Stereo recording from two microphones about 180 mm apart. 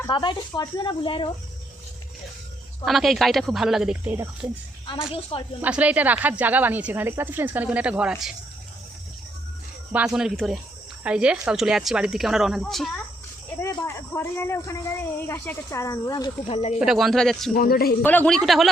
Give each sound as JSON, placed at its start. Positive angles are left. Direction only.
{"t": 0.1, "sound": "speech", "side_deg": 25}
{"t": 2.8, "sound": "speech", "side_deg": 0}
{"t": 5.3, "sound": "speech", "side_deg": 30}
{"t": 5.6, "sound": "speech", "side_deg": -10}
{"t": 9.9, "sound": "speech", "side_deg": -5}
{"t": 13.6, "sound": "speech", "side_deg": 15}
{"t": 16.7, "sound": "speech", "side_deg": -5}
{"t": 17.5, "sound": "a woman's voice", "side_deg": 55}
{"t": 18.0, "sound": "speech", "side_deg": 10}